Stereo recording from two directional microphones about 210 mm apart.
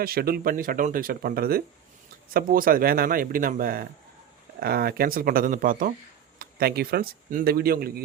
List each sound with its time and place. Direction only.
0.0 s speech: 45° right (ahead or behind)